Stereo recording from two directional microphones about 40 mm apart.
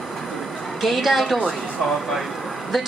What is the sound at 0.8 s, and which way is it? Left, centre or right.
Speech, centre.